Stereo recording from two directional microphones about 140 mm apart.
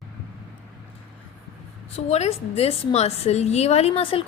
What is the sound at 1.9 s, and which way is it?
A woman's voice, 50° left (ahead or behind).